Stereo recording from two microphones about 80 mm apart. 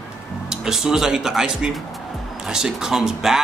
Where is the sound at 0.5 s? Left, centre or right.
Centre.